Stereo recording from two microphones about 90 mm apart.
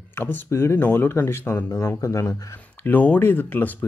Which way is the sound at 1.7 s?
35° left (ahead or behind).